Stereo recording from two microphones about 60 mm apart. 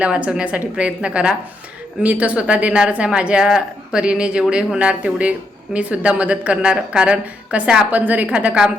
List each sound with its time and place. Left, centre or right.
0.0 s speech: centre